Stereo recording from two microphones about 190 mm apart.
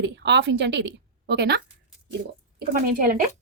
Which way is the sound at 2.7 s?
45° right (ahead or behind).